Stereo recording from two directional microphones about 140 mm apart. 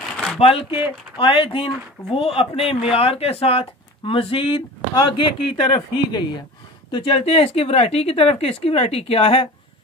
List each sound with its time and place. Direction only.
0.4 s a woman's voice: 45° left (ahead or behind)